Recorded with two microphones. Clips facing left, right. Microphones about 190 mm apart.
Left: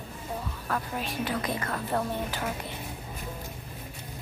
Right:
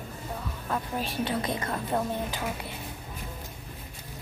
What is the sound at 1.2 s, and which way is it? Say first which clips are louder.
A woman's voice: right 1 dB; 25° right (ahead or behind).